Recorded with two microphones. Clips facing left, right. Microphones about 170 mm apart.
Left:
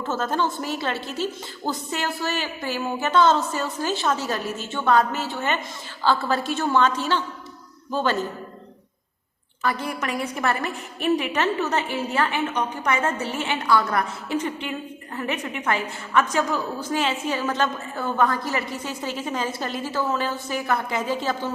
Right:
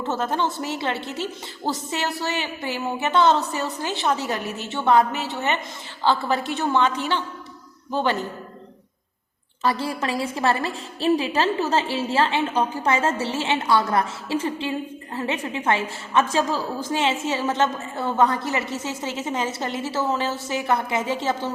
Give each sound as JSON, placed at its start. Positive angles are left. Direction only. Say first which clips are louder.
{"t": 0.0, "sound": "a woman's voice", "louder": "even", "side_deg": -20}
{"t": 10.0, "sound": "a woman's voice", "louder": "right 2 dB", "side_deg": -30}